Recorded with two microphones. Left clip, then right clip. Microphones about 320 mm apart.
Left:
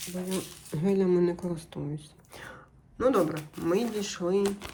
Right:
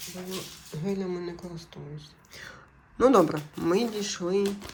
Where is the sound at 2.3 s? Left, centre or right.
Centre.